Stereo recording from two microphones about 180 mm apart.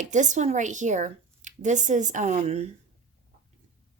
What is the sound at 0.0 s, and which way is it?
Speech, 45° right (ahead or behind).